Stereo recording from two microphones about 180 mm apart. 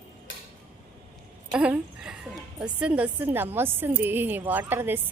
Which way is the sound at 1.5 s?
5° right (ahead or behind).